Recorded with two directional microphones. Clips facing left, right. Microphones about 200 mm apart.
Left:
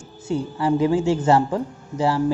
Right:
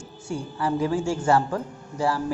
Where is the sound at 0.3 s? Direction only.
20° left (ahead or behind).